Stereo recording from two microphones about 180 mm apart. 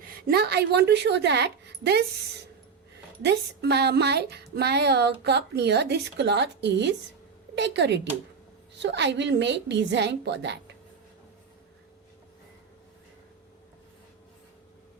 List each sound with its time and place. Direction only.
0.3 s speech: 60° right (ahead or behind)
3.2 s speech: 65° right (ahead or behind)